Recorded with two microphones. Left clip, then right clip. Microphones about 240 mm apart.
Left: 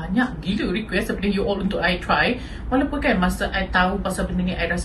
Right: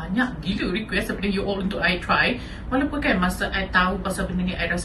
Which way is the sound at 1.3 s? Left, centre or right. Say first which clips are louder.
Left 5 dB; centre.